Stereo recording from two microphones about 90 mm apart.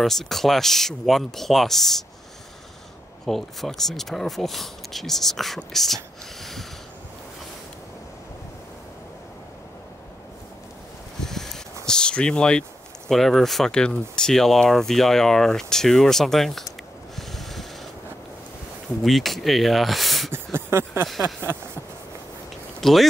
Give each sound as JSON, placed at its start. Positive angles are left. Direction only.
{"t": 0.0, "sound": "speech", "side_deg": 5}
{"t": 3.3, "sound": "speech", "side_deg": 5}
{"t": 11.1, "sound": "a sound", "side_deg": 5}
{"t": 13.1, "sound": "speech", "side_deg": 5}
{"t": 17.1, "sound": "snort", "side_deg": 0}
{"t": 19.0, "sound": "speech", "side_deg": 0}
{"t": 20.2, "sound": "a sound", "side_deg": -25}
{"t": 22.8, "sound": "speech", "side_deg": 5}